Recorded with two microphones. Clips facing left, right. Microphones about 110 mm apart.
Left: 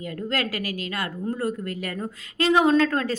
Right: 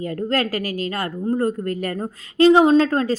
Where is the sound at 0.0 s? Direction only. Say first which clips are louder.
Right 6 dB; 40° right (ahead or behind).